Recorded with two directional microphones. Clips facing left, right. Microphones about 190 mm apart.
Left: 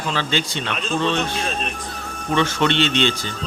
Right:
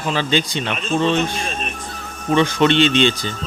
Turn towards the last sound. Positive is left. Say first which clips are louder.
# right 4 dB
turn(degrees=-15)  # may be behind; listen again after turning